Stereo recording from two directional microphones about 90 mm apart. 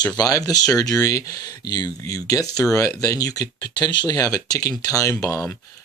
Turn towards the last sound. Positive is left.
turn(degrees=35)  # may be behind; listen again after turning